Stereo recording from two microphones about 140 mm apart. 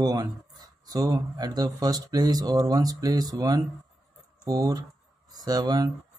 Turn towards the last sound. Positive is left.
turn(degrees=-25)  # may be behind; listen again after turning